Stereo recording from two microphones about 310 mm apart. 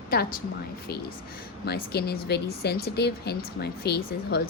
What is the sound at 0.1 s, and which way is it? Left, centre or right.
Speech, left.